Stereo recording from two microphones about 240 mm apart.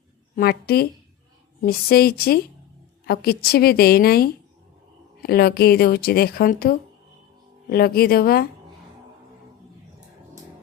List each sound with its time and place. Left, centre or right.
0.3 s speech: left